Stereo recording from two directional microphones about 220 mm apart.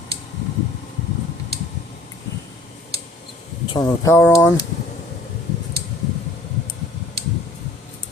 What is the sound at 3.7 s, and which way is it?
Speech, 15° left (ahead or behind).